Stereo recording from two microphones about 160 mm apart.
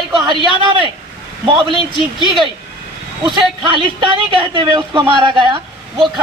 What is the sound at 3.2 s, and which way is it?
A man's voice, 30° right (ahead or behind).